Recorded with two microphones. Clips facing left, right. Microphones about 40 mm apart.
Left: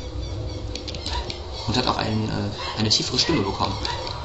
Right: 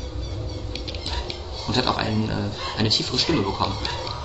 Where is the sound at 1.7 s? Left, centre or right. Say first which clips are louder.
Even; centre.